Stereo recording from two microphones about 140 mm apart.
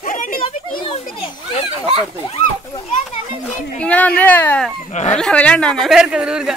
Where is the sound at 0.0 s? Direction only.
75° left (ahead or behind).